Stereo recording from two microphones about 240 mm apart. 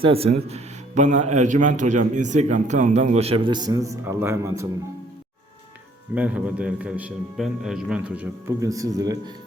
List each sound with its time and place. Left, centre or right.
0.0 s speech: right
6.1 s a man's voice: centre